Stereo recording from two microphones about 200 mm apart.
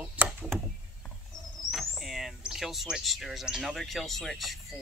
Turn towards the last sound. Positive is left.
turn(degrees=0)  # may be behind; listen again after turning